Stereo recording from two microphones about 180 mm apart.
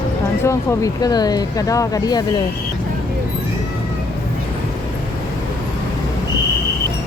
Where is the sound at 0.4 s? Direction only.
20° left (ahead or behind).